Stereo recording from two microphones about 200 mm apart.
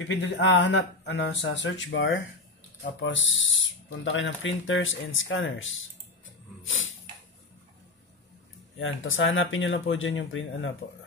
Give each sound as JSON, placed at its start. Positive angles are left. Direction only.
{"t": 0.1, "sound": "speech", "side_deg": 65}
{"t": 6.6, "sound": "snort", "side_deg": 75}
{"t": 8.7, "sound": "speech", "side_deg": 75}